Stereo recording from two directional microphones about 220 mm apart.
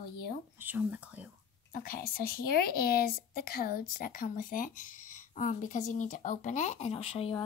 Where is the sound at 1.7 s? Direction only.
40° left (ahead or behind).